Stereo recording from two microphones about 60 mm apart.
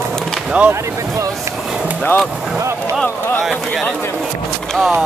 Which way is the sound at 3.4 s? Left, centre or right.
Centre.